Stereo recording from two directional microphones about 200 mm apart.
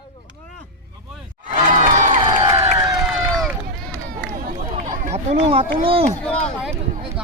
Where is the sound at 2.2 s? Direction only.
20° right (ahead or behind).